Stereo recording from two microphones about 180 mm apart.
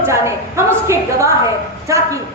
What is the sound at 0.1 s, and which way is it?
A woman's voice, 15° right (ahead or behind).